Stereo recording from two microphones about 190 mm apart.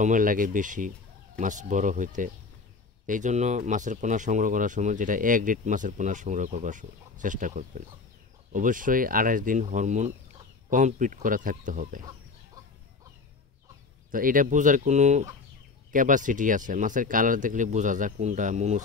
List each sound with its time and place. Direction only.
0.0 s speech: 45° right (ahead or behind)
14.1 s speech: 45° right (ahead or behind)